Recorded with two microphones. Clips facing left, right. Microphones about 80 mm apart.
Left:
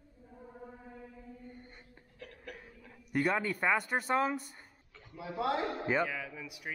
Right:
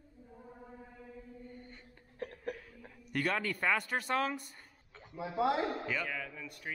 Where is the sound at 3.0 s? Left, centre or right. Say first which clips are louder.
Left 3 dB; centre.